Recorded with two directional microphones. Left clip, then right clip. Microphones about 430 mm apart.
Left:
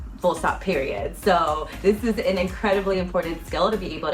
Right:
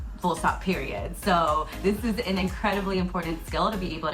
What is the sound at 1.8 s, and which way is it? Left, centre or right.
Speech, centre.